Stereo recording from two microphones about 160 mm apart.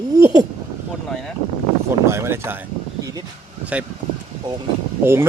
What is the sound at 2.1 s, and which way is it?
Speech, 15° right (ahead or behind).